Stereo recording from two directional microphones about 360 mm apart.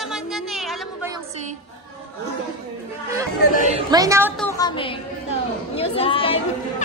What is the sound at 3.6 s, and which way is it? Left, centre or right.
Speech, centre.